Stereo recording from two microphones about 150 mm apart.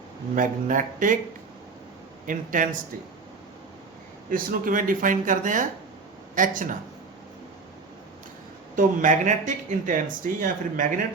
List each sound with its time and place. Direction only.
0.3 s speech: 60° right (ahead or behind)
2.2 s speech: 60° right (ahead or behind)
4.3 s speech: 65° right (ahead or behind)
8.7 s speech: 60° right (ahead or behind)